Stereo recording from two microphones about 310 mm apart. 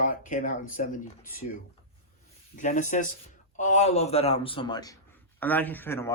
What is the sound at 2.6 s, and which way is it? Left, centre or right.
Speech, left.